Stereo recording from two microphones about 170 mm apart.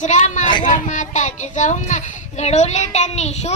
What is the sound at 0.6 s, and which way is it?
A woman's voice, 50° left (ahead or behind).